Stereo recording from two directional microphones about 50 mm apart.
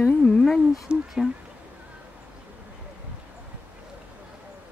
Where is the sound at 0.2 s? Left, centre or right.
Centre.